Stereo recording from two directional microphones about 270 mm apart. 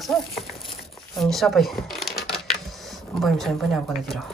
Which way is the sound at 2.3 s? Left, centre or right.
Centre.